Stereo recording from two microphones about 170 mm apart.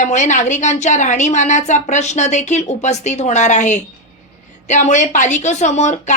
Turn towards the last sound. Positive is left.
turn(degrees=45)  # may be behind; listen again after turning